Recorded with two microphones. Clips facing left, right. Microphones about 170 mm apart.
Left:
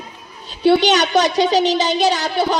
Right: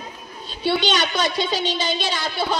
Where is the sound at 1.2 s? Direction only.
40° left (ahead or behind).